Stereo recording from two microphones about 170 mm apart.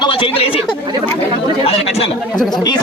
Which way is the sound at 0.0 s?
30° left (ahead or behind).